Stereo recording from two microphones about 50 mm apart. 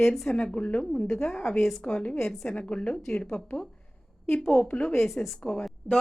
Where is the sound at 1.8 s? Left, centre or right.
Centre.